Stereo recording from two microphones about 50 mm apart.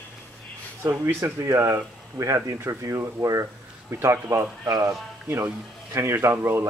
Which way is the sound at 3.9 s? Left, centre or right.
Right.